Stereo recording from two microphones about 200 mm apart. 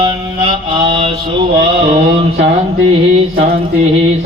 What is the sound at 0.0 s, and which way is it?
Mantra, 25° right (ahead or behind).